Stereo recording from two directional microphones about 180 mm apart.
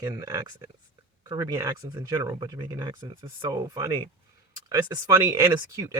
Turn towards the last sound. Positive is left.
turn(degrees=-15)  # may be behind; listen again after turning